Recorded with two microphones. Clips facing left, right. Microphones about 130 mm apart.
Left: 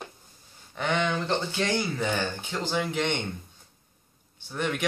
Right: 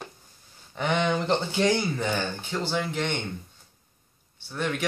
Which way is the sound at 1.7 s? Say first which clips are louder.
Right 2 dB; 5° right (ahead or behind).